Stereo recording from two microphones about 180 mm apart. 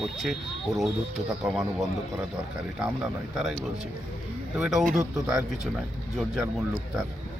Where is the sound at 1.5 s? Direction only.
5° right (ahead or behind).